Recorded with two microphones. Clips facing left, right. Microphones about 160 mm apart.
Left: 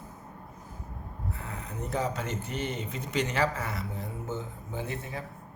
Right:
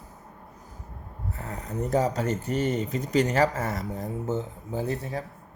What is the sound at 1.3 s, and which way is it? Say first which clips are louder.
Speech: right 5 dB; 40° right (ahead or behind).